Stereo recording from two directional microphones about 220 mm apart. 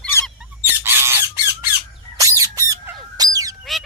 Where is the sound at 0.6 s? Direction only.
10° right (ahead or behind).